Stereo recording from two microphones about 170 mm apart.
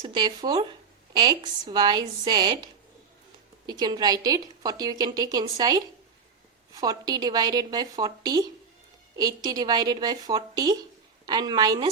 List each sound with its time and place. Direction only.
0.0 s a woman's voice: 25° right (ahead or behind)
3.7 s a woman's voice: 25° right (ahead or behind)